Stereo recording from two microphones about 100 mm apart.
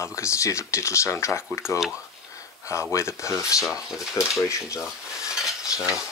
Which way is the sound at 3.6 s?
5° right (ahead or behind).